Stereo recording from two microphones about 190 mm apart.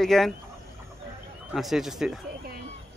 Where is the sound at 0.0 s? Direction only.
Centre (ahead or behind).